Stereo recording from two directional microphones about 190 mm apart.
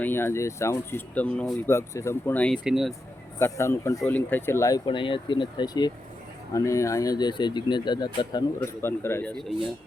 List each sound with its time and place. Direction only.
0.0 s speech: 10° left (ahead or behind)
3.3 s speech: 15° left (ahead or behind)